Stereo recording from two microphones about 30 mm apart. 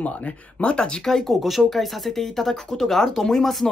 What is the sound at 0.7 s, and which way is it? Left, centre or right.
Speech, left.